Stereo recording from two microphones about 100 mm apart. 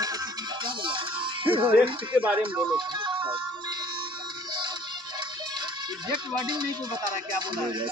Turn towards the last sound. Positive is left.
turn(degrees=-50)  # may be behind; listen again after turning